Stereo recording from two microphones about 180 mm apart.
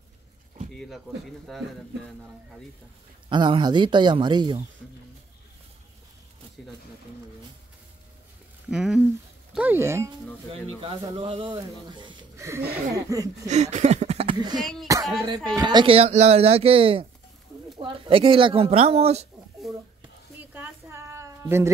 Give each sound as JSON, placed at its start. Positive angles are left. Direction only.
{"t": 0.7, "sound": "speech", "side_deg": 0}
{"t": 3.3, "sound": "speech", "side_deg": -25}
{"t": 8.6, "sound": "speech", "side_deg": -5}
{"t": 11.1, "sound": "speech", "side_deg": -30}
{"t": 13.5, "sound": "a sound", "side_deg": -40}
{"t": 14.3, "sound": "speech", "side_deg": -25}
{"t": 20.3, "sound": "a sound", "side_deg": -10}